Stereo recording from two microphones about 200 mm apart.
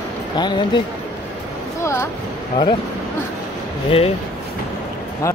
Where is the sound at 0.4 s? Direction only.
20° left (ahead or behind).